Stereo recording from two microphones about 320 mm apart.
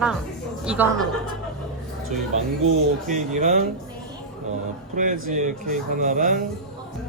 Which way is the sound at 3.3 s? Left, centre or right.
Right.